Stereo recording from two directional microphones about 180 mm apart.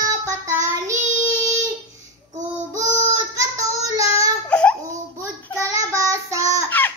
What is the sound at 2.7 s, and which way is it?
Child singing, 20° right (ahead or behind).